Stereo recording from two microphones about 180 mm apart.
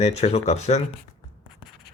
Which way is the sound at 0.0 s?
35° left (ahead or behind).